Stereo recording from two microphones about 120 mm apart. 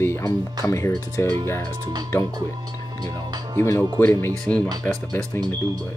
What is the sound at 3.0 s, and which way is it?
Speech, 35° right (ahead or behind).